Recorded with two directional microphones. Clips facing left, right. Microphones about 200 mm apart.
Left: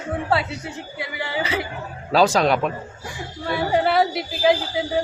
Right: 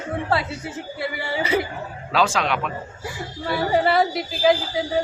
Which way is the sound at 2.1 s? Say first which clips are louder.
Left 5 dB; 40° left (ahead or behind).